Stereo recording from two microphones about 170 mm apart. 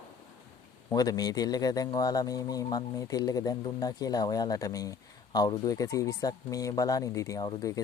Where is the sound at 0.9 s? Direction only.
20° left (ahead or behind).